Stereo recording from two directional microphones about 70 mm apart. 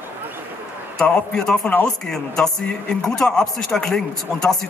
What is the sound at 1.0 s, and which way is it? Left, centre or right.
Speech, centre.